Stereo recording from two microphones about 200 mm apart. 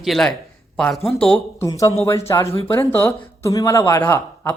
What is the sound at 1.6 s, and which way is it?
Speech, 15° left (ahead or behind).